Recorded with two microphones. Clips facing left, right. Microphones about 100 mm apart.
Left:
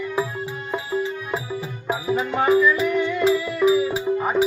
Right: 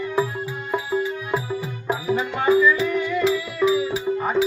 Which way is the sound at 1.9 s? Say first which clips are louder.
Even; 10° left (ahead or behind).